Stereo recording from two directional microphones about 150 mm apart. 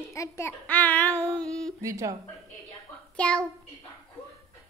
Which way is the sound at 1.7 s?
20° right (ahead or behind).